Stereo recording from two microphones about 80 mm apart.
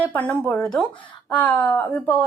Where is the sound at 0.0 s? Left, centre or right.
Left.